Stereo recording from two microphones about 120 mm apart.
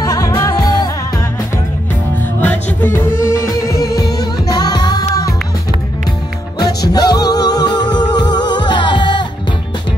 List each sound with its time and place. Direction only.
0.0 s music: 30° left (ahead or behind)
2.4 s music: 15° left (ahead or behind); by 5.0 s 35° left (ahead or behind)
6.6 s music: 35° left (ahead or behind)